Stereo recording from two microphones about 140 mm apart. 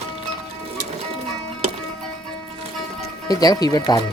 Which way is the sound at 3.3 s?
25° left (ahead or behind).